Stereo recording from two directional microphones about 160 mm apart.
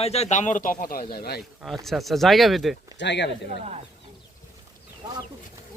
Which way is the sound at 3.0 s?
90° left.